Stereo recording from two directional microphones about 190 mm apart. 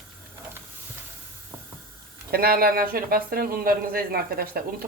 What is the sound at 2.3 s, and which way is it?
Speech, 55° right (ahead or behind).